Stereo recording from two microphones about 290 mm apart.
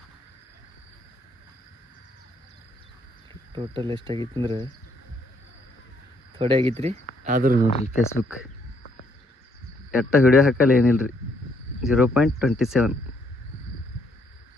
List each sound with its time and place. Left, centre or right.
3.5 s speech: centre
6.3 s speech: centre
7.7 s speech: left
9.9 s speech: centre